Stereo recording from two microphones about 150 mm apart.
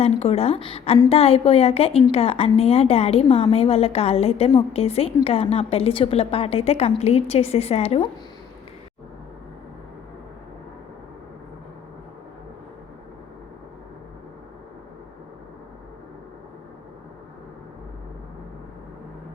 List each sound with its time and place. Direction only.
0.0 s a woman's voice: 40° left (ahead or behind)